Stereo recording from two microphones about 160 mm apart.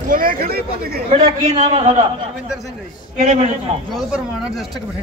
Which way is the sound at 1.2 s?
45° right (ahead or behind).